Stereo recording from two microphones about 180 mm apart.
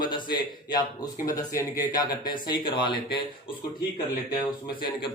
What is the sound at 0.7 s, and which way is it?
Speech, 20° left (ahead or behind).